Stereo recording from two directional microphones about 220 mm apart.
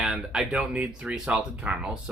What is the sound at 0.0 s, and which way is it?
Speech, 5° right (ahead or behind).